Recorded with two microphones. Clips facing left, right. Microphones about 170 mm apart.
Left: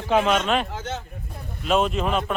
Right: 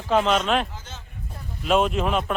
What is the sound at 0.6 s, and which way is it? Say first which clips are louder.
Speech: left 10 dB; 75° left (ahead or behind).